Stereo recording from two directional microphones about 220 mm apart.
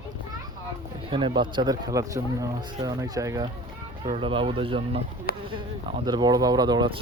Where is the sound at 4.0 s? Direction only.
25° right (ahead or behind).